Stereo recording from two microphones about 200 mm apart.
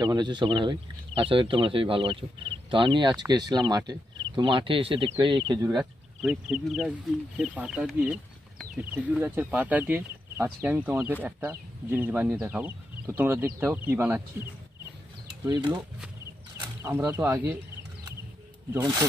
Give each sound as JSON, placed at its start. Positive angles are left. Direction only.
{"t": 0.0, "sound": "speech", "side_deg": -20}
{"t": 5.8, "sound": "speech", "side_deg": 0}
{"t": 15.4, "sound": "speech", "side_deg": -20}
{"t": 18.7, "sound": "speech", "side_deg": -15}